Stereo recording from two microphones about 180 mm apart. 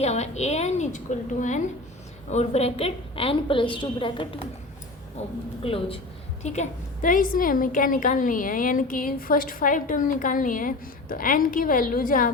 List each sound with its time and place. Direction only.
0.0 s a woman's voice: 35° left (ahead or behind)
5.6 s a woman's voice: 30° left (ahead or behind); by 12.3 s 50° left (ahead or behind)